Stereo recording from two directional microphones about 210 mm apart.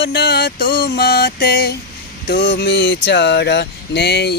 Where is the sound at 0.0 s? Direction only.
50° left (ahead or behind).